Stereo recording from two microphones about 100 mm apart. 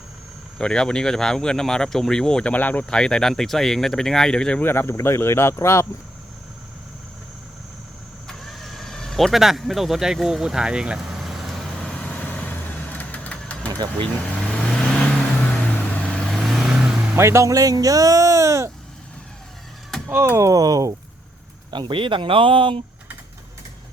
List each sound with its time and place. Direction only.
0.6 s speech: 10° left (ahead or behind)
4.6 s speech: 20° left (ahead or behind)
8.3 s vehicle: centre (ahead or behind)
14.9 s vehicle: 10° left (ahead or behind); by 16.9 s 5° right (ahead or behind)
17.2 s speech: 25° right (ahead or behind)
20.1 s speech: 25° right (ahead or behind)
21.7 s speech: 50° right (ahead or behind)